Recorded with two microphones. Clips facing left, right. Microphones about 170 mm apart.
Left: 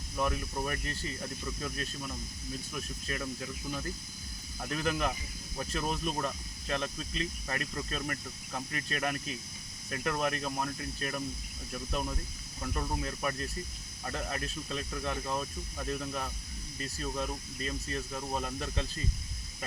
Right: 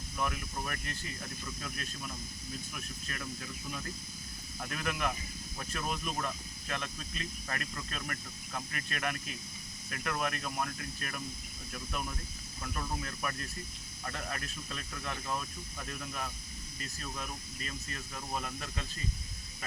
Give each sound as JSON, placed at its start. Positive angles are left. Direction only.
{"t": 0.2, "sound": "speech", "side_deg": 30}
{"t": 4.7, "sound": "speech", "side_deg": 25}